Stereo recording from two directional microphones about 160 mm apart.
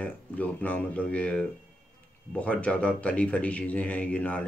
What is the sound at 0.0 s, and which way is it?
Speech, 10° left (ahead or behind).